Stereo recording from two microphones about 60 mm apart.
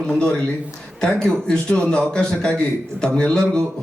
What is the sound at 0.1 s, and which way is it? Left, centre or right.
A man's voice, centre.